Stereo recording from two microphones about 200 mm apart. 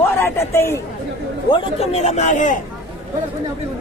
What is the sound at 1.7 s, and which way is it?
Speech, 30° left (ahead or behind).